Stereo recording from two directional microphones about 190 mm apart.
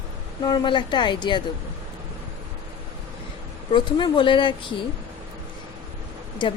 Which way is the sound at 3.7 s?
25° left (ahead or behind).